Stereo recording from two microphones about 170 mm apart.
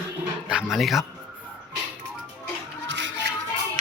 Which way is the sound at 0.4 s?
5° right (ahead or behind).